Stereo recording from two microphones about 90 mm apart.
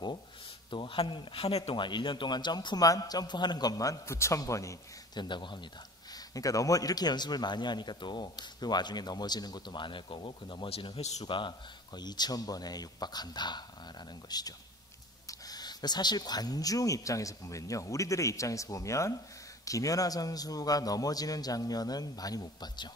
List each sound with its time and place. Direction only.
0.7 s a man's voice: 70° left (ahead or behind); by 4.7 s 35° left (ahead or behind)
5.1 s speech: 55° left (ahead or behind)
6.1 s a man's voice: 40° left (ahead or behind)